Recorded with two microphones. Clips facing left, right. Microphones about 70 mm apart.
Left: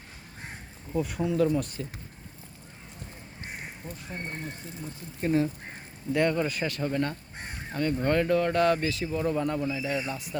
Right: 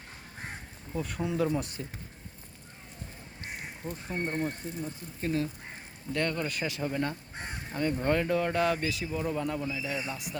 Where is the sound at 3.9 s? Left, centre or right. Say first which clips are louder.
Right 6 dB; right.